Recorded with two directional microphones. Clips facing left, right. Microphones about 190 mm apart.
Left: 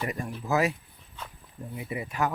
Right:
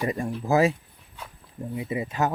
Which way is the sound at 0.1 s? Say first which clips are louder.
Right 6 dB; 25° right (ahead or behind).